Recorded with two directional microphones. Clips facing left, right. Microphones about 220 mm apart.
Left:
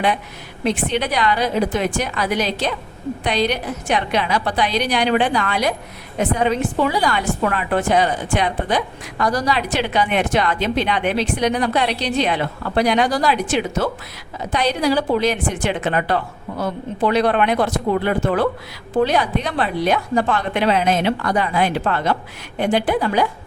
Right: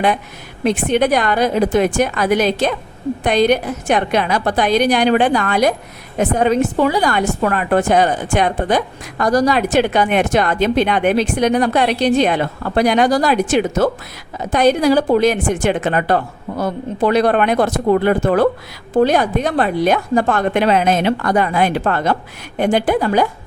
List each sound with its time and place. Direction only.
0.6 s a woman's voice: 50° right (ahead or behind)